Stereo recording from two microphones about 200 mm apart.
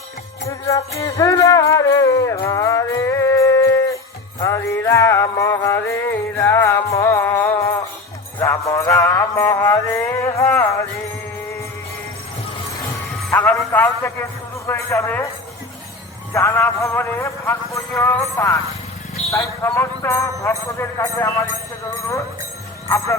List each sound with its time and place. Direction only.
0.4 s jingle bell: 15° left (ahead or behind)
4.4 s music: 15° left (ahead or behind)
13.3 s music: 10° left (ahead or behind)
14.7 s a man's voice: 15° left (ahead or behind)
16.3 s a man's voice: 15° left (ahead or behind)